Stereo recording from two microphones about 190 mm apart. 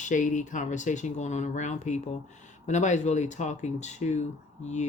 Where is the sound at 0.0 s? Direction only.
40° left (ahead or behind).